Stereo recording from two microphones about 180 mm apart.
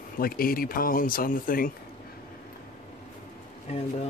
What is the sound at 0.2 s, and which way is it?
Speech, 55° left (ahead or behind).